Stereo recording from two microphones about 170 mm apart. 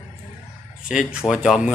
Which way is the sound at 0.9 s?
5° right (ahead or behind).